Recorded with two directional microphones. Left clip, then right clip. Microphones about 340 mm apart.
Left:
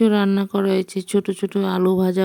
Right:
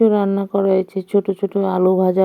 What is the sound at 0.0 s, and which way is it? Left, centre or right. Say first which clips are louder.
Speech: right 3 dB; left.